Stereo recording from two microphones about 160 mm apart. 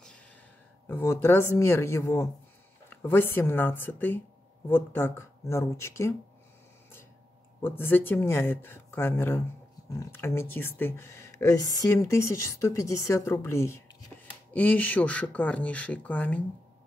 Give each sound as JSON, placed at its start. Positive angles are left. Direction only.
{"t": 0.8, "sound": "speech", "side_deg": 15}
{"t": 7.6, "sound": "speech", "side_deg": 15}